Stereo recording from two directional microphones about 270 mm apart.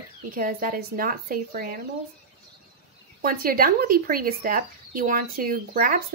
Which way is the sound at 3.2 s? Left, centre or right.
Right.